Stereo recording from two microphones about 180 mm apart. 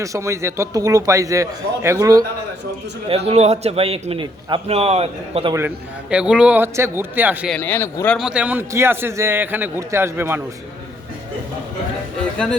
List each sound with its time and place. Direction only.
0.0 s a man's voice: 15° right (ahead or behind)
3.2 s a man's voice: 35° right (ahead or behind)
5.5 s a man's voice: 10° right (ahead or behind)
7.5 s speech: 10° left (ahead or behind)
8.2 s a man's voice: 5° right (ahead or behind)